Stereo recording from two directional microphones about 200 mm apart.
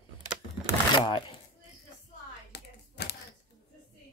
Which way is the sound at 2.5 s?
55° left (ahead or behind).